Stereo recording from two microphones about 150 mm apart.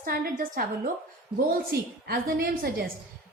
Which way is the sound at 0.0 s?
70° right (ahead or behind).